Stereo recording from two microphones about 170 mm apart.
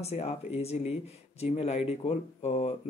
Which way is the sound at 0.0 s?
40° left (ahead or behind).